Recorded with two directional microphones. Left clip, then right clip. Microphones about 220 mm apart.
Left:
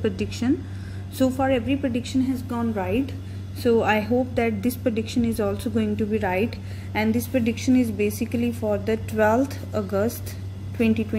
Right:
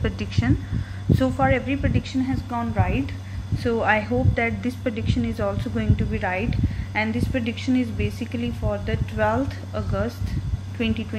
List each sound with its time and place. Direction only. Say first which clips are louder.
0.0 s a woman's voice: left 2 dB; 15° left (ahead or behind)